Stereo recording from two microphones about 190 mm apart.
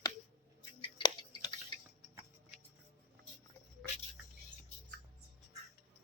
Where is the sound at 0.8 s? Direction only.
25° left (ahead or behind).